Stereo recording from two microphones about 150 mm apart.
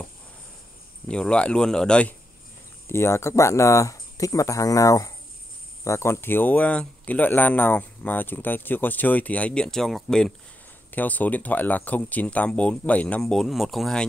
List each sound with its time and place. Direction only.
1.0 s speech: 5° left (ahead or behind)
2.9 s speech: 15° left (ahead or behind); by 14.0 s centre (ahead or behind)